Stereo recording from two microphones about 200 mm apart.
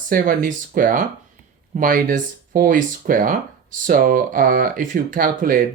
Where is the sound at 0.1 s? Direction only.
45° right (ahead or behind).